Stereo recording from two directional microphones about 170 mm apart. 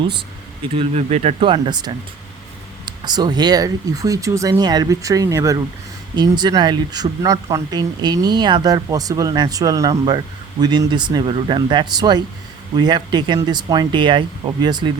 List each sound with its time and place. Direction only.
0.7 s speech: 35° right (ahead or behind)